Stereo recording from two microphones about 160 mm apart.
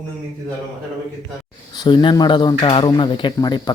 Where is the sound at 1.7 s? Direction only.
25° left (ahead or behind).